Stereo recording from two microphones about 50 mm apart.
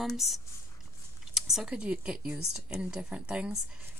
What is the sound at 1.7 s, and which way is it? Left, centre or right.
A woman's voice, centre.